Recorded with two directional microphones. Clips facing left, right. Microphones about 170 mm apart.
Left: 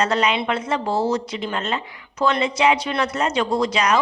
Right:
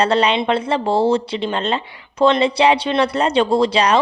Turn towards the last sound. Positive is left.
turn(degrees=-30)  # may be behind; listen again after turning